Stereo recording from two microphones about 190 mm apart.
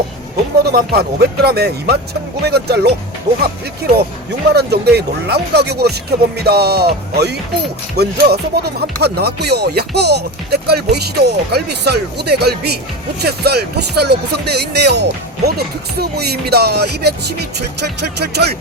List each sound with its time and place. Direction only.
0.6 s speech: 55° right (ahead or behind)
4.5 s speech: 60° right (ahead or behind)